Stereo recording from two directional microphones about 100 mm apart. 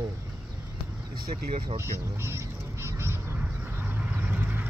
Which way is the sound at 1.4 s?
75° right (ahead or behind).